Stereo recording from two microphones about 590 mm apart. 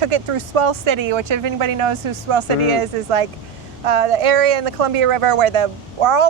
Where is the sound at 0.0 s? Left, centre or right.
Right.